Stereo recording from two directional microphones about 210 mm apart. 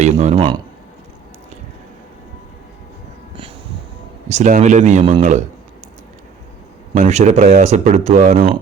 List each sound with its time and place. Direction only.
0.0 s speech: 30° right (ahead or behind)
4.3 s speech: 35° right (ahead or behind)
6.9 s speech: 35° right (ahead or behind)